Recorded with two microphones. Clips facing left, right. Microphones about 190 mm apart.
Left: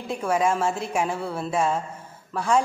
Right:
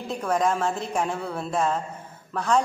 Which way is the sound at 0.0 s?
10° left (ahead or behind).